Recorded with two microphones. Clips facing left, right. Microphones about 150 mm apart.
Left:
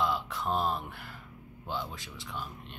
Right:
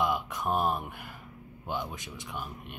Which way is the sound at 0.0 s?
15° right (ahead or behind).